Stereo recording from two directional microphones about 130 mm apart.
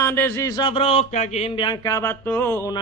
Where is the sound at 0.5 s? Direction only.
40° left (ahead or behind); by 1.5 s 65° left (ahead or behind).